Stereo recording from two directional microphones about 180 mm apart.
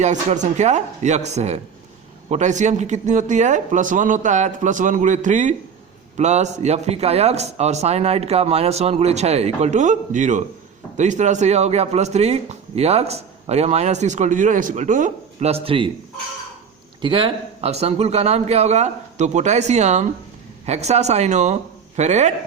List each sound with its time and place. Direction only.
0.0 s speech: 40° right (ahead or behind)
17.0 s speech: 30° right (ahead or behind)